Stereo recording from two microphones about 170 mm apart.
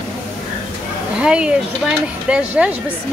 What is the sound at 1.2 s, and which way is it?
Speech, 5° right (ahead or behind).